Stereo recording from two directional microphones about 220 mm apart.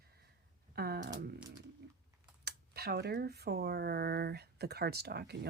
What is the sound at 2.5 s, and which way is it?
Speech, 45° right (ahead or behind).